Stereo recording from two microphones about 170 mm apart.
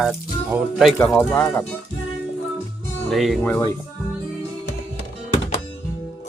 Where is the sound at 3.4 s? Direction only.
10° left (ahead or behind).